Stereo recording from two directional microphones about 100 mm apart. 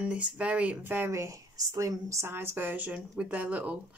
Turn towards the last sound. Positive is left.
turn(degrees=-15)  # may be behind; listen again after turning